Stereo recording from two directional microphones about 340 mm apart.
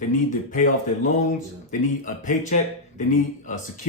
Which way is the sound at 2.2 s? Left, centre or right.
Left.